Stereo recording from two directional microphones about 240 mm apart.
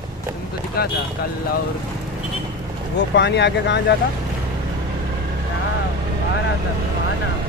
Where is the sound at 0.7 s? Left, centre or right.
Left.